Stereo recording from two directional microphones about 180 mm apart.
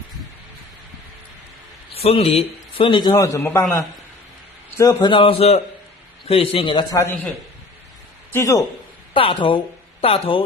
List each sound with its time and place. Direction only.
1.9 s a man's voice: 35° left (ahead or behind); by 3.6 s 15° left (ahead or behind)
4.8 s a man's voice: 20° left (ahead or behind)
8.3 s speech: 15° left (ahead or behind)
9.1 s a man's voice: 30° left (ahead or behind)